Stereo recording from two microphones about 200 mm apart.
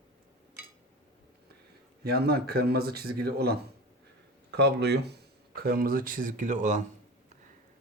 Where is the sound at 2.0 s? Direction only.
50° right (ahead or behind).